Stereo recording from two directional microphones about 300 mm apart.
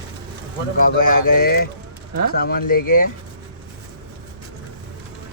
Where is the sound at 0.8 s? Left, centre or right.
Left.